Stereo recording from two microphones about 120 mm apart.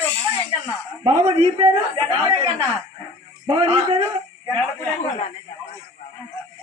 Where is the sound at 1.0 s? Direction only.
45° right (ahead or behind).